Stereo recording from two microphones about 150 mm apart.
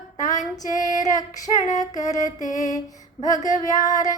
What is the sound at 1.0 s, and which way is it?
Female singing, 25° left (ahead or behind).